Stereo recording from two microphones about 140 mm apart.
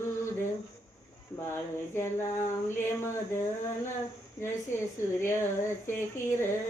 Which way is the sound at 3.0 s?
20° left (ahead or behind).